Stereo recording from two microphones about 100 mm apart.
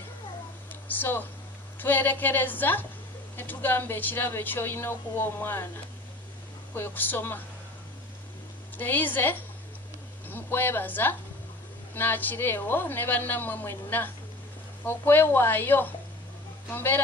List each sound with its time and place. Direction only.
0.8 s speech: 20° left (ahead or behind)
6.7 s speech: 20° left (ahead or behind)
8.7 s speech: 20° left (ahead or behind)